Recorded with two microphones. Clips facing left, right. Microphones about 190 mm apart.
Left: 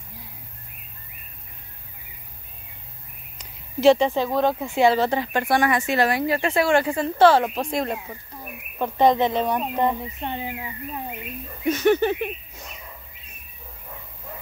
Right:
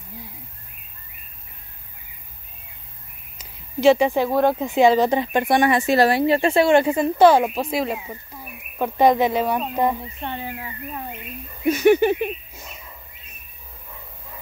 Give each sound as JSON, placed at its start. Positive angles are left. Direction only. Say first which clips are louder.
{"t": 3.3, "sound": "speech", "louder": "right 1 dB", "side_deg": -5}
{"t": 10.2, "sound": "speech", "louder": "even", "side_deg": 15}
{"t": 11.6, "sound": "speech", "louder": "right 3 dB", "side_deg": -10}